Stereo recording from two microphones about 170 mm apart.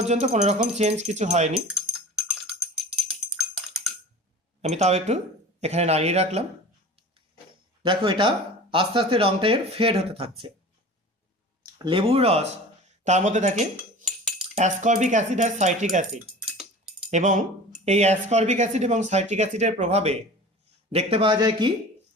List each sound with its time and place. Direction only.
0.0 s speech: 40° right (ahead or behind)
2.5 s music: centre (ahead or behind)
4.6 s speech: 40° right (ahead or behind)
7.8 s speech: 30° right (ahead or behind)
11.6 s speech: 25° right (ahead or behind)